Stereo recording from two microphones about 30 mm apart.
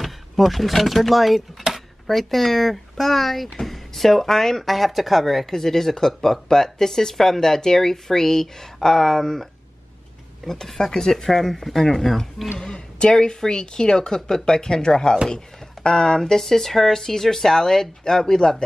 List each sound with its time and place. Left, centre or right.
0.0 s speech: centre
5.5 s speech: centre
10.9 s speech: centre
12.7 s speech: left